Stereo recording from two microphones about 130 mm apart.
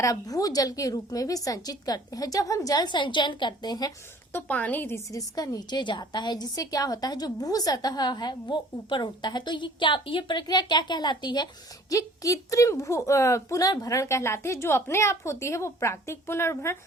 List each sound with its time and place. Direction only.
0.0 s a woman's voice: 25° left (ahead or behind)
4.3 s a woman's voice: 15° left (ahead or behind)
5.1 s a woman's voice: 30° left (ahead or behind)